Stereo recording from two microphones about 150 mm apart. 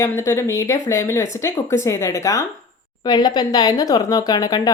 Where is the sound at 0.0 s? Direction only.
20° left (ahead or behind).